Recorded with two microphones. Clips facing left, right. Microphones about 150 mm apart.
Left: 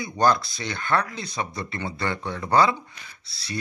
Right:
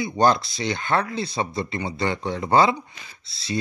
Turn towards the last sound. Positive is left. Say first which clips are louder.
# right 6 dB
turn(degrees=-25)  # may be behind; listen again after turning